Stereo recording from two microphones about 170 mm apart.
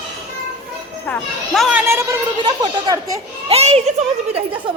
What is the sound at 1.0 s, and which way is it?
Speech, 5° left (ahead or behind).